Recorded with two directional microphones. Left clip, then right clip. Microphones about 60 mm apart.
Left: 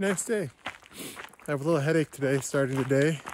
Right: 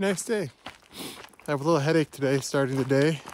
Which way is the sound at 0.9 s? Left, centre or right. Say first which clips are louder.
Right 1 dB; right.